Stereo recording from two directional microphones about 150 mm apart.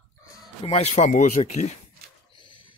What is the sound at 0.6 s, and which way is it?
Speech, 45° left (ahead or behind).